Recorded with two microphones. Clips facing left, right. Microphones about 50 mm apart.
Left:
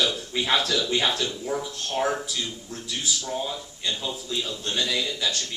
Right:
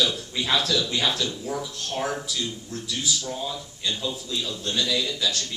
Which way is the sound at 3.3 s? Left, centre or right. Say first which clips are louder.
Left 1 dB; centre.